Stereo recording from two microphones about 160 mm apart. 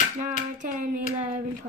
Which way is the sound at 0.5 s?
55° right (ahead or behind).